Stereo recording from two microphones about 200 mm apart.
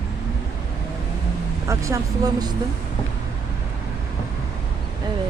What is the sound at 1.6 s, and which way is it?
Speech, 15° right (ahead or behind).